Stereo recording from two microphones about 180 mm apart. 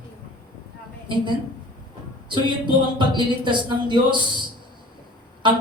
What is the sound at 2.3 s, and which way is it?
A woman's voice, 25° right (ahead or behind).